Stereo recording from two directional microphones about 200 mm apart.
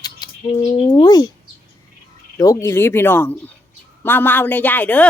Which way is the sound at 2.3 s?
15° left (ahead or behind).